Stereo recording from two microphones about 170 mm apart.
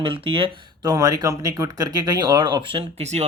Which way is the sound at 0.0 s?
30° right (ahead or behind).